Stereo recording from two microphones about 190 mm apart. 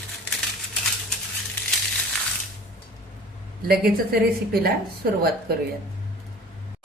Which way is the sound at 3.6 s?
55° right (ahead or behind).